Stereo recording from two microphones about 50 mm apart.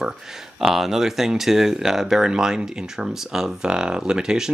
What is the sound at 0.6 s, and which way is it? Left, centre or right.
Speech, centre.